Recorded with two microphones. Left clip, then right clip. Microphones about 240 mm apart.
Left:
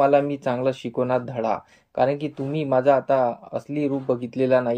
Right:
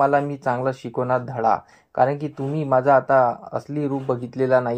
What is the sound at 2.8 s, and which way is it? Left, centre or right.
Speech, centre.